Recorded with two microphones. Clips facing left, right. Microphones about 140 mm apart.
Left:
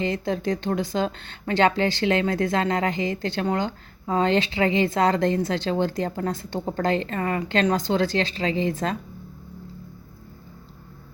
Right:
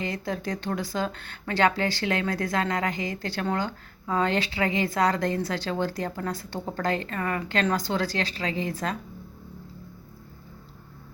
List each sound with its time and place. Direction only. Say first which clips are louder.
0.0 s speech: left 5 dB; 25° left (ahead or behind)